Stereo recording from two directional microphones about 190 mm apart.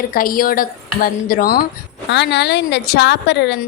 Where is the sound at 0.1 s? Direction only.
50° left (ahead or behind).